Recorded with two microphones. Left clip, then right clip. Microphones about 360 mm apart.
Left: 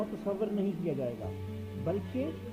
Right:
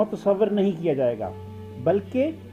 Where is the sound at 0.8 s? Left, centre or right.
Right.